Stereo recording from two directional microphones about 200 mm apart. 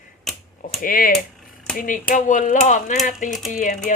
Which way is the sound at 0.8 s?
45° left (ahead or behind).